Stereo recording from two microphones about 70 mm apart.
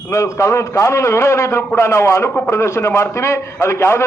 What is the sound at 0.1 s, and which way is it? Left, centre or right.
A man's voice, left.